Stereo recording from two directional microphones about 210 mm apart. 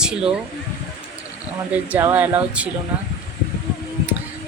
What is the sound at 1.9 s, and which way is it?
Speech, 10° right (ahead or behind).